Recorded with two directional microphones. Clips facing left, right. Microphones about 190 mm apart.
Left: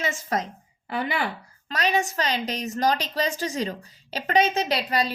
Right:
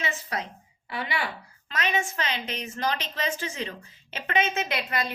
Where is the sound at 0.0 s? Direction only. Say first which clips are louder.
Left 5 dB; 45° left (ahead or behind).